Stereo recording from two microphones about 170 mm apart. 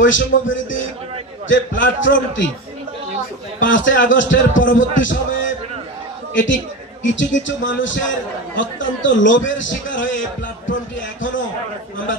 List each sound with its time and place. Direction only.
0.0 s a man's voice: 90° left
1.8 s a man's voice: 90° left
3.5 s a man's voice: 90° left
7.0 s a man's voice: 90° left
10.7 s a sound: 90° left